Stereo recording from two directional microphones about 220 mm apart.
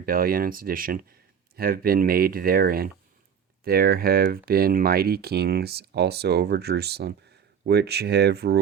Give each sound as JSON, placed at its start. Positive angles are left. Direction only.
{"t": 0.0, "sound": "speech", "side_deg": -40}